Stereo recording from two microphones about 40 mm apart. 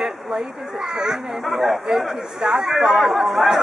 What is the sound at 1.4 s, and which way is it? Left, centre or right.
Speech, centre.